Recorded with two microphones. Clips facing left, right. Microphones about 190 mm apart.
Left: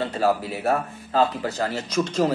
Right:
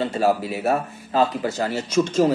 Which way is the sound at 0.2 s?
20° right (ahead or behind).